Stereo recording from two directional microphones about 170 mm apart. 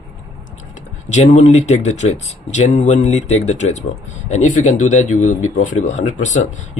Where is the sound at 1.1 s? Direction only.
45° left (ahead or behind).